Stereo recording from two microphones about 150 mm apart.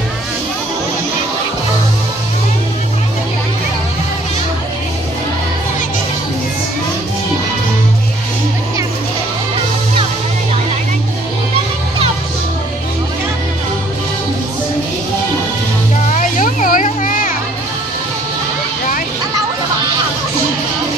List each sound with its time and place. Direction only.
16.1 s music: 60° left (ahead or behind)